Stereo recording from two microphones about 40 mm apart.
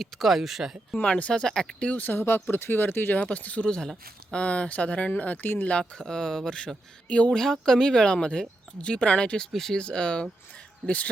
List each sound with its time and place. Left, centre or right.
0.0 s speech: centre
0.9 s speech: left
2.0 s speech: left
3.2 s speech: left
6.0 s speech: centre
9.5 s speech: centre
9.7 s speech: left
10.8 s speech: left